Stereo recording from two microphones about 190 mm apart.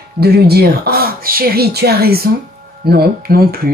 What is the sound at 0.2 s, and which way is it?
Speech, 55° right (ahead or behind).